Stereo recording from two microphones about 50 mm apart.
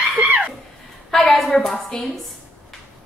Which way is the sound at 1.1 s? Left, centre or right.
Centre.